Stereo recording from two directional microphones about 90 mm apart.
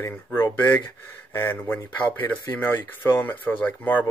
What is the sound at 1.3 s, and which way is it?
Speech, 25° left (ahead or behind).